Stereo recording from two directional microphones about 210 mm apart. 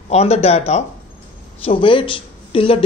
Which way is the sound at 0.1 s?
30° left (ahead or behind).